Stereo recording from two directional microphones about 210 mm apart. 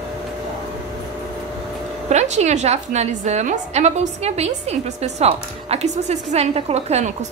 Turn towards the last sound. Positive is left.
turn(degrees=-30)  # may be behind; listen again after turning